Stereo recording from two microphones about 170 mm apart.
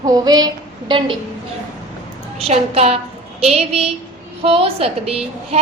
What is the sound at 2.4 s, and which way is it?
A woman's voice, 35° right (ahead or behind).